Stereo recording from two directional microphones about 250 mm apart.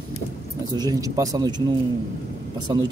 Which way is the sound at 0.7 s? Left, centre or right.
Centre.